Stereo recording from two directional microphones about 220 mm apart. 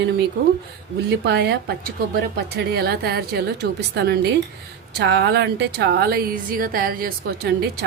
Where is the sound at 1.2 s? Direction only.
50° right (ahead or behind).